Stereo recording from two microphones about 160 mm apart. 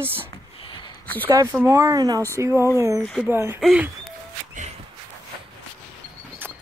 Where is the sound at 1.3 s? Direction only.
15° right (ahead or behind).